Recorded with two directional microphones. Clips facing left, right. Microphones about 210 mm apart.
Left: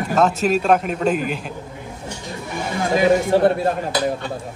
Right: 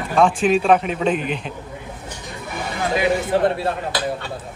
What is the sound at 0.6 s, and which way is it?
Speech, centre (ahead or behind).